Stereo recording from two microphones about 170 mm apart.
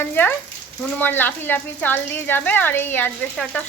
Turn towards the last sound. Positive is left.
turn(degrees=5)  # may be behind; listen again after turning